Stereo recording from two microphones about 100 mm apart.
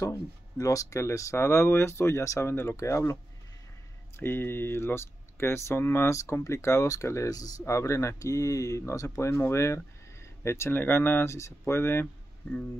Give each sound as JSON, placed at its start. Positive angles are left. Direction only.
{"t": 0.0, "sound": "speech", "side_deg": 35}
{"t": 4.2, "sound": "speech", "side_deg": 20}